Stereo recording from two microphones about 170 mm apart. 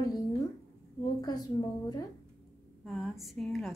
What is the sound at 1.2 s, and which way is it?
Speech, 25° left (ahead or behind).